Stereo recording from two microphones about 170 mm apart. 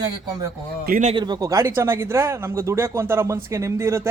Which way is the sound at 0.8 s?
55° right (ahead or behind).